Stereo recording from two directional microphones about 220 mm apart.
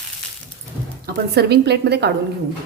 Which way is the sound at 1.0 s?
45° right (ahead or behind).